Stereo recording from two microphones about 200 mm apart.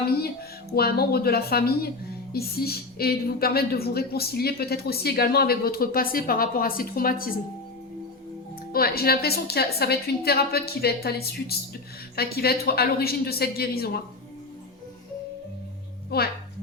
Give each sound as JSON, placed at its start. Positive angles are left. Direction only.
{"t": 0.0, "sound": "a woman's voice", "side_deg": 50}
{"t": 8.7, "sound": "a woman's voice", "side_deg": 50}
{"t": 16.0, "sound": "a woman's voice", "side_deg": 50}